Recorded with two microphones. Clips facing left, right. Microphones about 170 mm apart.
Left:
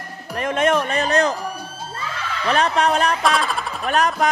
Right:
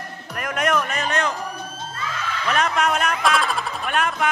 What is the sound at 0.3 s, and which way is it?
Music, 25° left (ahead or behind).